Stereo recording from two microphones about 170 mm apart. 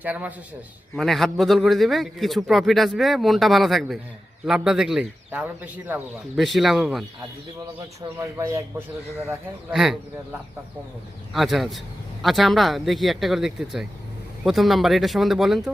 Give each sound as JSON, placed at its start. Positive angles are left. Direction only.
{"t": 0.0, "sound": "speech", "side_deg": -10}
{"t": 0.9, "sound": "a man's voice", "side_deg": 0}
{"t": 8.2, "sound": "speech", "side_deg": -15}
{"t": 9.6, "sound": "a man's voice", "side_deg": 0}
{"t": 11.3, "sound": "a man's voice", "side_deg": 0}